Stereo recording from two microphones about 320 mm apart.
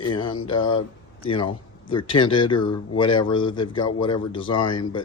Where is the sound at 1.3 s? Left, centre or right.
Centre.